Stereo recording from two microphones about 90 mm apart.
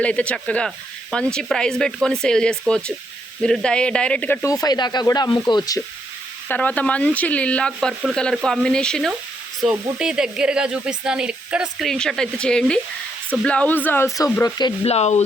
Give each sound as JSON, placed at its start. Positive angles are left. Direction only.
{"t": 0.0, "sound": "speech", "side_deg": 15}
{"t": 4.4, "sound": "speech", "side_deg": 45}
{"t": 5.3, "sound": "speech", "side_deg": 55}
{"t": 6.5, "sound": "speech", "side_deg": 15}
{"t": 9.6, "sound": "speech", "side_deg": -5}
{"t": 11.9, "sound": "speech", "side_deg": 5}
{"t": 14.6, "sound": "speech", "side_deg": 55}